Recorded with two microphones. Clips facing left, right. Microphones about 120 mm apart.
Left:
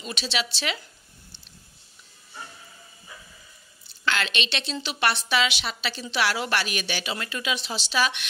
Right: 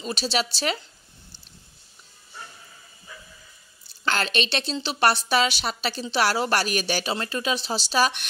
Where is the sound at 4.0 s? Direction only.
40° right (ahead or behind).